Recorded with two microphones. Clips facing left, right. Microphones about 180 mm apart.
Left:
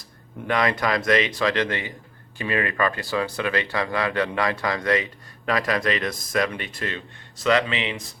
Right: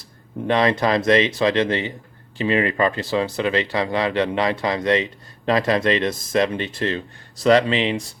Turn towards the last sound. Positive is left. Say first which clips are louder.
# right 6 dB
turn(degrees=-35)  # may be behind; listen again after turning